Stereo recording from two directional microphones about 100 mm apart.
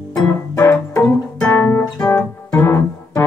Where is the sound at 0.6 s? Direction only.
35° left (ahead or behind).